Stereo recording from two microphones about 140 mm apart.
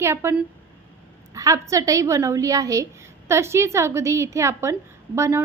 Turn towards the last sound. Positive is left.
turn(degrees=-20)  # may be behind; listen again after turning